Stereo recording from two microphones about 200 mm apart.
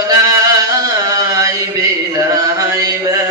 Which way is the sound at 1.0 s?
15° right (ahead or behind).